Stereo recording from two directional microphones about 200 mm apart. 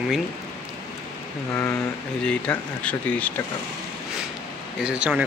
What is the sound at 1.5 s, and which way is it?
Speech, 15° left (ahead or behind).